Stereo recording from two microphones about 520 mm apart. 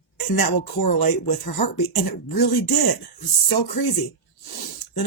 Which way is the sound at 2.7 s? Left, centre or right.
Left.